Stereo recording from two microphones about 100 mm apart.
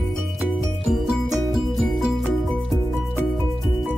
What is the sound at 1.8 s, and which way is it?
Music, centre (ahead or behind).